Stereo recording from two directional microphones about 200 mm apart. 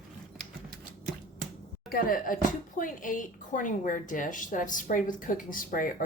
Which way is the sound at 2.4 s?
40° left (ahead or behind).